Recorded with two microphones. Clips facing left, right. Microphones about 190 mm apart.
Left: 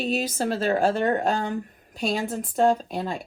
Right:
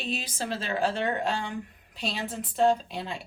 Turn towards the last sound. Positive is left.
turn(degrees=45)  # may be behind; listen again after turning